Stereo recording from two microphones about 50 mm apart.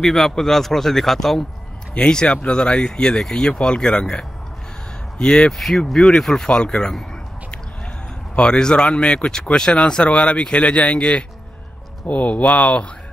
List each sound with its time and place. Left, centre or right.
0.0 s speech: centre
2.0 s speech: centre
5.6 s speech: centre
8.5 s speech: centre